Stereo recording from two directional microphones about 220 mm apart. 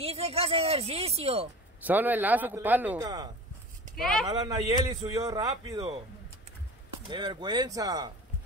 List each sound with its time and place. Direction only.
0.0 s speech: 25° right (ahead or behind)
1.9 s speech: 10° right (ahead or behind)
3.9 s speech: centre (ahead or behind)
4.3 s speech: 15° right (ahead or behind)
7.1 s speech: 20° right (ahead or behind)